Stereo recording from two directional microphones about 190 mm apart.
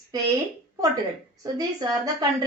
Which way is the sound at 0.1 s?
20° right (ahead or behind).